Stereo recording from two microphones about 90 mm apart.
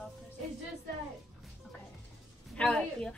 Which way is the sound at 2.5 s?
15° left (ahead or behind).